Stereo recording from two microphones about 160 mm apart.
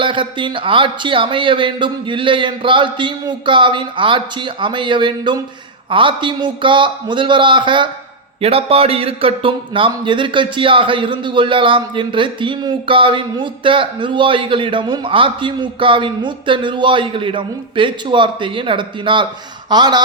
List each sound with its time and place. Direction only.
0.0 s a man's voice: 30° right (ahead or behind)